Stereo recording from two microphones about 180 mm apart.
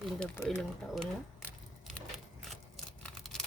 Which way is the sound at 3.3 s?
Centre (ahead or behind).